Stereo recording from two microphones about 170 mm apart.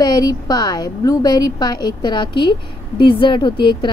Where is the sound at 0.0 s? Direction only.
25° left (ahead or behind).